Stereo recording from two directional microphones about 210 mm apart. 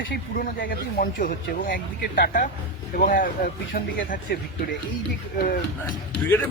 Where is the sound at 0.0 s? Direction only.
50° left (ahead or behind).